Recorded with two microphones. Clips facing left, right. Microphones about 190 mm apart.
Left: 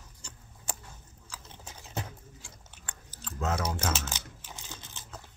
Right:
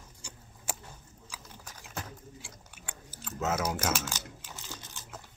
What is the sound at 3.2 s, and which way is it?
Speech, 5° right (ahead or behind).